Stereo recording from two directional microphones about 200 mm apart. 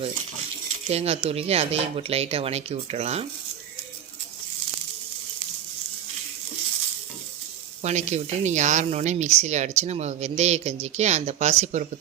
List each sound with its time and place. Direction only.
0.9 s speech: 30° right (ahead or behind)
7.8 s speech: 35° right (ahead or behind)